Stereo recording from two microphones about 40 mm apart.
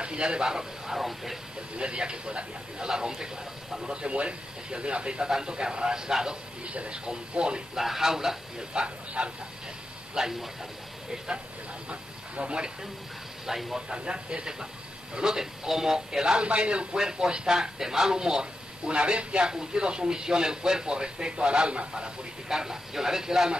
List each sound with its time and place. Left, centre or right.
0.0 s speech: right; by 1.4 s centre
1.8 s speech: right
6.6 s speech: right
7.7 s speech: centre
8.7 s speech: right
10.1 s speech: centre; by 12.7 s right
13.5 s speech: centre
13.7 s speech: centre
19.4 s speech: centre
22.5 s speech: centre